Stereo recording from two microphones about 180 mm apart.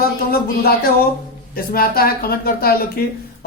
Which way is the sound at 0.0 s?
60° left (ahead or behind).